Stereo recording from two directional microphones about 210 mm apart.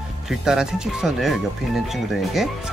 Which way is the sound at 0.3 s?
5° right (ahead or behind).